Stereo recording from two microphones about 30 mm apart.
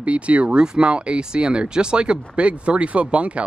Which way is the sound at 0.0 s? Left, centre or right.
Right.